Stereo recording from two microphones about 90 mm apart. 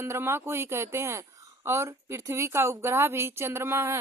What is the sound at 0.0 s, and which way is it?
Speech, 30° right (ahead or behind).